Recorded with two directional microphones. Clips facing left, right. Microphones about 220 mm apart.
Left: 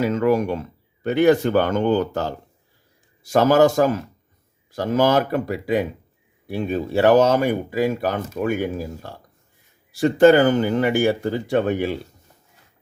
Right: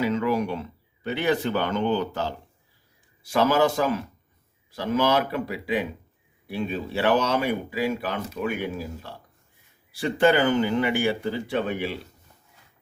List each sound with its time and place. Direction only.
0.0 s speech: 45° left (ahead or behind)